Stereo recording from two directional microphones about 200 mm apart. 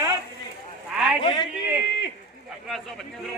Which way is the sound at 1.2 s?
20° left (ahead or behind).